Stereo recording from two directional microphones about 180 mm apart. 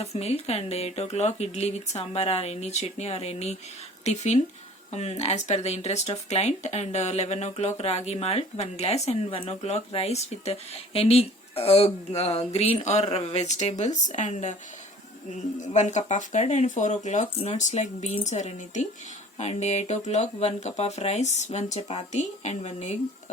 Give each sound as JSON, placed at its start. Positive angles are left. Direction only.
{"t": 0.0, "sound": "speech", "side_deg": 35}